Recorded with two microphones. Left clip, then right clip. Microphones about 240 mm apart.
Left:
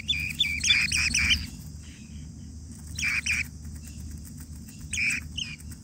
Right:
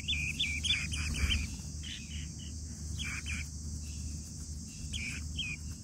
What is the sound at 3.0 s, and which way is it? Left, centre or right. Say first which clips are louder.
Bird: left 14 dB; centre.